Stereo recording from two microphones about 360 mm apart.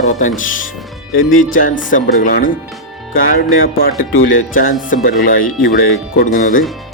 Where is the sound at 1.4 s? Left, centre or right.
Left.